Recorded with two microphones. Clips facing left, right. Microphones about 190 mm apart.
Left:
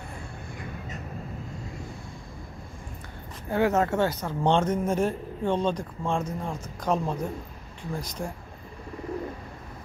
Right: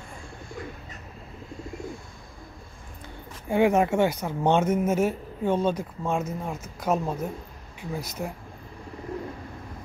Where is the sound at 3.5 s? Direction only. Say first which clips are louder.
Right 3 dB; 15° right (ahead or behind).